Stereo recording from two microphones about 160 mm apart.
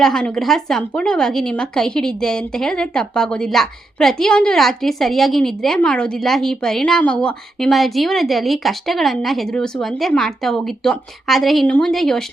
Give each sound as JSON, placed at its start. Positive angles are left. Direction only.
{"t": 0.0, "sound": "a woman's voice", "side_deg": 5}